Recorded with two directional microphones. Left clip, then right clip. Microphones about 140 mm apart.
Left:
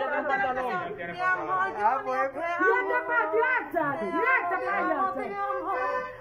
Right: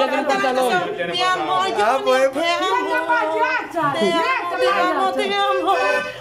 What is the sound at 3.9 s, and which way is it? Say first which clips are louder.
Speech: right 11 dB; 35° right (ahead or behind).